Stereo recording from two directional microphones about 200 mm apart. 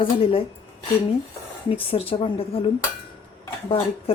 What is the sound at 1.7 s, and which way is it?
Speech, 30° left (ahead or behind).